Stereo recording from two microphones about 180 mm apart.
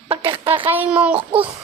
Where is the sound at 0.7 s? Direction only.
10° right (ahead or behind).